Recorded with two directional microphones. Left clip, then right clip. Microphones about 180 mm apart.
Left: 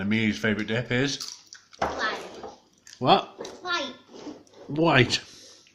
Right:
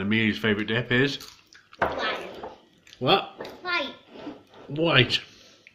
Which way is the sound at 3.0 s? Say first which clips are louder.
Left 2 dB; 35° left (ahead or behind).